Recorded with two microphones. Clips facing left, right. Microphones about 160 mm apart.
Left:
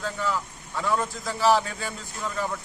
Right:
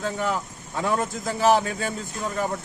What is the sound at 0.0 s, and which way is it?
Speech, 55° right (ahead or behind).